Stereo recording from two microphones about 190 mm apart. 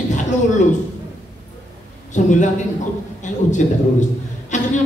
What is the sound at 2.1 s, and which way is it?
A woman's voice, 40° left (ahead or behind).